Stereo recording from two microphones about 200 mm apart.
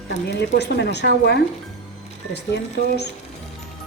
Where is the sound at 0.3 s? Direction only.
55° left (ahead or behind).